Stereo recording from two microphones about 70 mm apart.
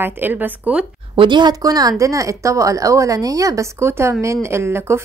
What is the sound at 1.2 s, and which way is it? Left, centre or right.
Speech, right.